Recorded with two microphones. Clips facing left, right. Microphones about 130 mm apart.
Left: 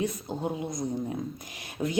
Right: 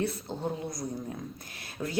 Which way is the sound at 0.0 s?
15° left (ahead or behind).